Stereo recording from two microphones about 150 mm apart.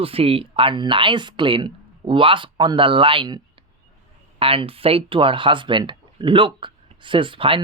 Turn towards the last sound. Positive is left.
turn(degrees=-35)  # may be behind; listen again after turning